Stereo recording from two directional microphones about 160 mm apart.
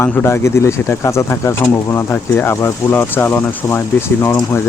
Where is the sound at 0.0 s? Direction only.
15° left (ahead or behind).